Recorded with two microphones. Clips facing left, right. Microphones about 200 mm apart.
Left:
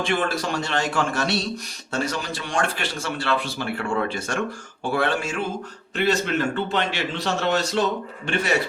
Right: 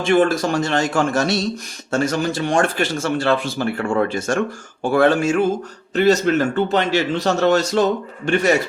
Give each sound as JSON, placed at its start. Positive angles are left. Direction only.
{"t": 0.0, "sound": "a man's voice", "side_deg": -45}